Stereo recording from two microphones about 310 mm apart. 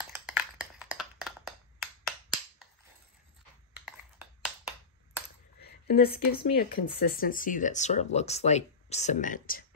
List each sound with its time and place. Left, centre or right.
0.1 s finger snapping: centre
3.8 s a sound: centre
5.9 s speech: left